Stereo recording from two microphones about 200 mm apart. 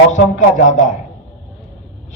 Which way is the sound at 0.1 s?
35° left (ahead or behind).